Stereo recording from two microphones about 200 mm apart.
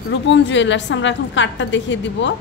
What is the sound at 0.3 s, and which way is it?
A woman's voice, 65° left (ahead or behind).